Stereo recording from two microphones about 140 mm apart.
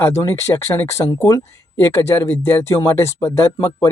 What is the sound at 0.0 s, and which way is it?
Speech, 25° left (ahead or behind).